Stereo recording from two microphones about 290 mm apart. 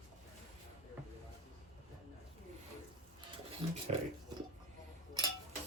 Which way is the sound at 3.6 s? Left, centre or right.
Centre.